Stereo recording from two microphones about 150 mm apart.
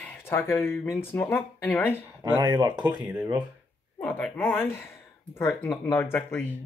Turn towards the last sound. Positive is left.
turn(degrees=15)  # may be behind; listen again after turning